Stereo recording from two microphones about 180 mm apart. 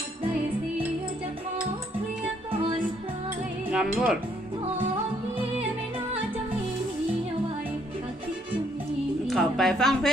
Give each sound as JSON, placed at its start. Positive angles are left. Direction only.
{"t": 3.7, "sound": "speech", "side_deg": -5}
{"t": 9.2, "sound": "a woman's voice", "side_deg": 0}